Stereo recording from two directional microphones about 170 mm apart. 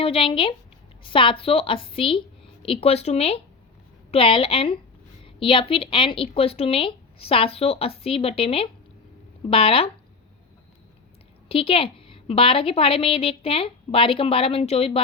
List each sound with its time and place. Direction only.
0.0 s a woman's voice: 30° left (ahead or behind)
11.4 s a woman's voice: 35° left (ahead or behind)